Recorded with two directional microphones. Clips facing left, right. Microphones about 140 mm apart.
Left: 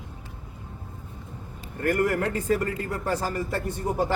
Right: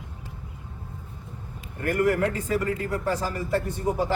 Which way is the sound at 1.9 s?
45° left (ahead or behind).